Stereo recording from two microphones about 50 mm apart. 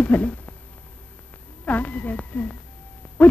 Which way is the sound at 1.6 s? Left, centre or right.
Left.